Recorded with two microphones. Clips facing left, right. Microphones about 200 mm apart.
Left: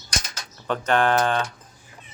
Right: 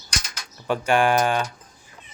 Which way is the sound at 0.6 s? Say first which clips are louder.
Right 1 dB; 10° right (ahead or behind).